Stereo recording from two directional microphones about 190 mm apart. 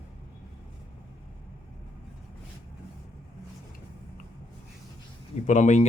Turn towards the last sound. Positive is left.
turn(degrees=40)  # may be behind; listen again after turning